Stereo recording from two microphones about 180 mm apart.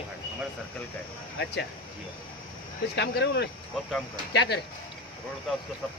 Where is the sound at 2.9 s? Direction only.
70° left (ahead or behind).